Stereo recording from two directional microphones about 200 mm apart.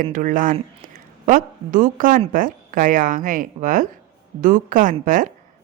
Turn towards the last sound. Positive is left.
turn(degrees=-40)  # may be behind; listen again after turning